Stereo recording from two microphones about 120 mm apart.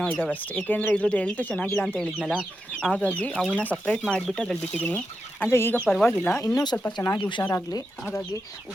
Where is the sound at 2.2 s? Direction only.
10° right (ahead or behind).